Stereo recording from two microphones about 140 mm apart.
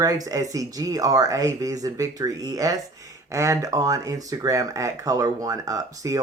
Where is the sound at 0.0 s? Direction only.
25° right (ahead or behind).